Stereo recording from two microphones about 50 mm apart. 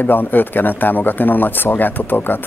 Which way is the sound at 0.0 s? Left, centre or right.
Left.